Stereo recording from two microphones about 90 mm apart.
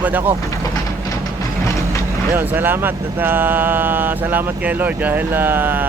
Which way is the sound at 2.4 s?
25° right (ahead or behind).